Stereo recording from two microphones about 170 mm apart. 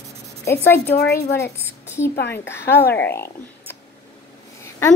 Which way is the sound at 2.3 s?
15° left (ahead or behind).